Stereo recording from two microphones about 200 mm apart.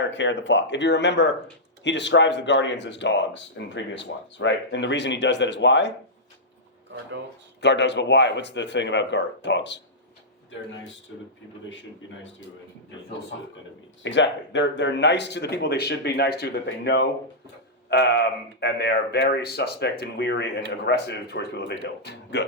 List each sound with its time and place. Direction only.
0.0 s speech: 65° left (ahead or behind)
7.6 s speech: 60° left (ahead or behind)
14.0 s speech: 65° left (ahead or behind)